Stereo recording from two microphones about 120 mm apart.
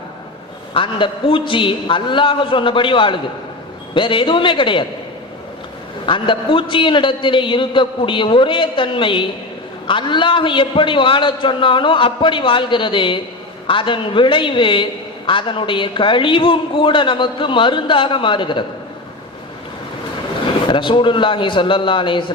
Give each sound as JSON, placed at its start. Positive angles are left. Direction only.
{"t": 0.7, "sound": "a man's voice", "side_deg": 45}
{"t": 6.1, "sound": "a man's voice", "side_deg": 45}
{"t": 20.7, "sound": "a man's voice", "side_deg": 45}